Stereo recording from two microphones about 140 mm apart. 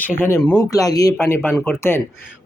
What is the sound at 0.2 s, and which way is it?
Speech, 15° left (ahead or behind).